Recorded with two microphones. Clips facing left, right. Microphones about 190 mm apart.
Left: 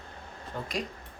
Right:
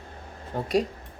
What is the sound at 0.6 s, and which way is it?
Speech, 35° right (ahead or behind).